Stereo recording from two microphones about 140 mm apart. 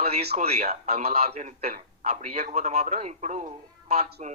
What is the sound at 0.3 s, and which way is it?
Speech, 55° right (ahead or behind).